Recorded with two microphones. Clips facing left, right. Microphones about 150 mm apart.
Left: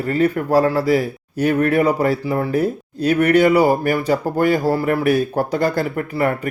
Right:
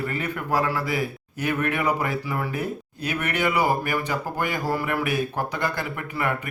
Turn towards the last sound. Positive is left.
turn(degrees=40)  # may be behind; listen again after turning